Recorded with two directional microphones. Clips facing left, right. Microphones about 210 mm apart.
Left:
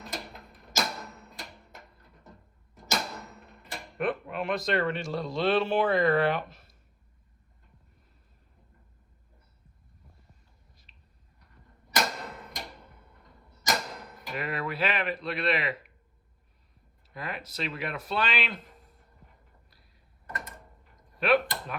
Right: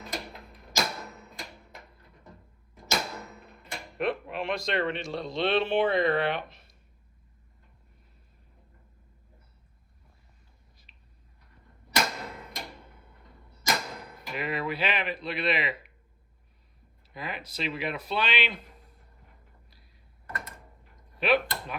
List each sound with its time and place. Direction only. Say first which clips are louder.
0.0 s music: right 2 dB; centre (ahead or behind)
2.7 s a sound: right 1 dB; centre (ahead or behind)
3.9 s speech: even; 25° right (ahead or behind)
4.9 s speech: left 1 dB; 5° left (ahead or behind)
10.9 s a sound: even; 5° right (ahead or behind)
11.9 s tick-tock: even; centre (ahead or behind)
13.9 s a sound: even; centre (ahead or behind)
17.2 s speech: even; centre (ahead or behind)
21.2 s speech: left 1 dB; centre (ahead or behind)